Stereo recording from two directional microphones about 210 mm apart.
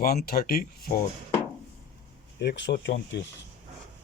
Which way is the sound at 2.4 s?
55° left (ahead or behind).